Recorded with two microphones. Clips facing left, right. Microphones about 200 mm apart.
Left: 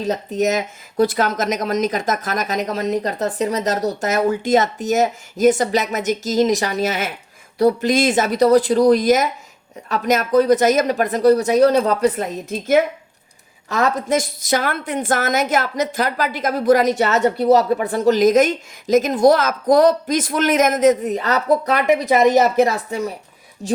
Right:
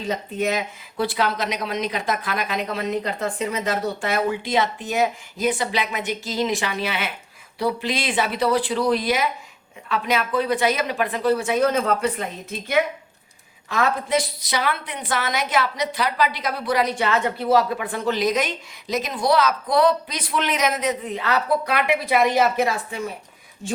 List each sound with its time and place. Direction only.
0.0 s a woman's voice: 40° left (ahead or behind)